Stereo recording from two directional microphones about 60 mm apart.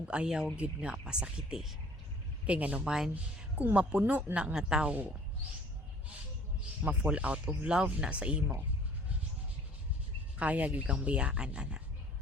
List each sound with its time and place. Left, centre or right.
0.0 s speech: centre
2.5 s speech: right
6.8 s speech: centre
10.3 s speech: right